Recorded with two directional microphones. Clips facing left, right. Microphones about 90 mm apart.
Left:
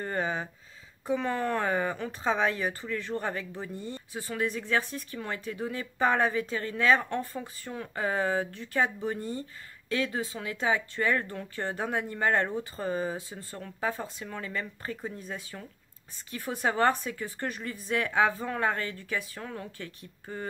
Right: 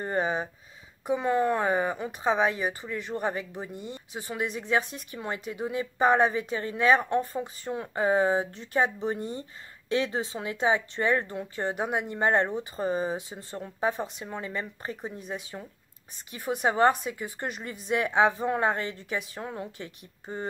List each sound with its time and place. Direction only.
0.0 s speech: 20° right (ahead or behind)